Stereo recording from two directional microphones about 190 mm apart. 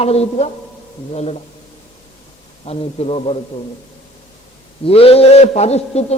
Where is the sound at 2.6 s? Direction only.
30° left (ahead or behind).